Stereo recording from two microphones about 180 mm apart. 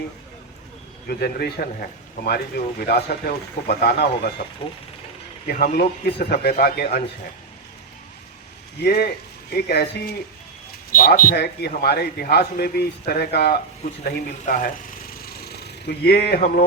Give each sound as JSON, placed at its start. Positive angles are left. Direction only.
{"t": 1.0, "sound": "a man's voice", "side_deg": 60}
{"t": 5.5, "sound": "a man's voice", "side_deg": 55}
{"t": 8.8, "sound": "a man's voice", "side_deg": 60}
{"t": 14.0, "sound": "a sound", "side_deg": 50}